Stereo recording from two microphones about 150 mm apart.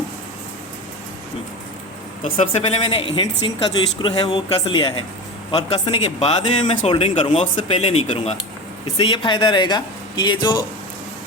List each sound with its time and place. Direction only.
2.3 s speech: 45° left (ahead or behind)
9.0 s speech: 35° left (ahead or behind)